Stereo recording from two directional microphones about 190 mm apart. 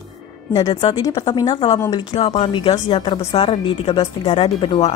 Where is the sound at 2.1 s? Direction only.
30° left (ahead or behind).